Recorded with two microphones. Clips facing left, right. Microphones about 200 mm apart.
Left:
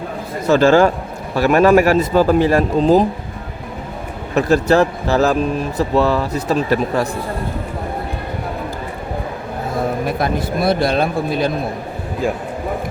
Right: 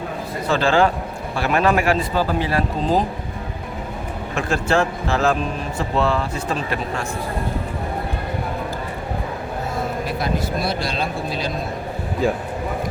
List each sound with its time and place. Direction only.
0.4 s speech: 45° left (ahead or behind)
4.4 s speech: 40° left (ahead or behind)
10.1 s speech: 55° left (ahead or behind)